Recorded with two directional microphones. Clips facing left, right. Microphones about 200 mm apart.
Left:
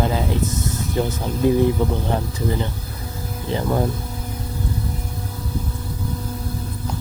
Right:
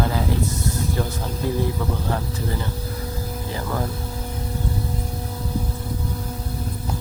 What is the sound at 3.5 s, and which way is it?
Speech, 25° left (ahead or behind).